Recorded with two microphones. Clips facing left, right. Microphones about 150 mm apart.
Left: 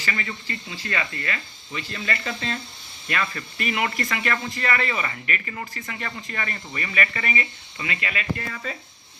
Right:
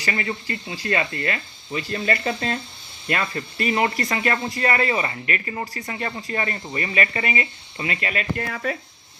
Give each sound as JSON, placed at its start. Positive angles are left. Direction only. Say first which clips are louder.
{"t": 0.0, "sound": "speech", "louder": "right 4 dB", "side_deg": -35}
{"t": 8.4, "sound": "speech", "louder": "right 6 dB", "side_deg": -65}